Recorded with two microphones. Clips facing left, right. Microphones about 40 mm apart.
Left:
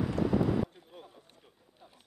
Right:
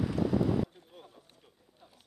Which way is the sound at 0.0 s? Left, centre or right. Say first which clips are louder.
Even; centre.